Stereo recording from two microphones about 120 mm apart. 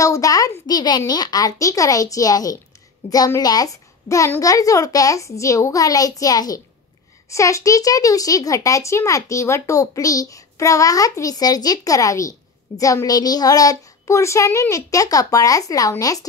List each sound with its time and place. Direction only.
0.0 s a child's voice: 30° left (ahead or behind)